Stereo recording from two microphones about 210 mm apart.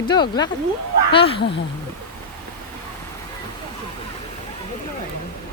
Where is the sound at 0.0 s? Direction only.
20° left (ahead or behind).